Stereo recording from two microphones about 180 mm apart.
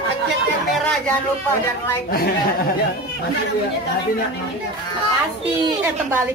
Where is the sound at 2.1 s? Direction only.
55° left (ahead or behind).